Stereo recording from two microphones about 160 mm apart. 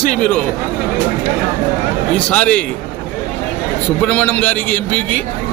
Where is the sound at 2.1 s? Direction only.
10° left (ahead or behind).